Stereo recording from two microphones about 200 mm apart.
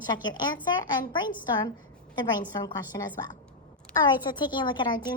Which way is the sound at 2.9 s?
20° left (ahead or behind).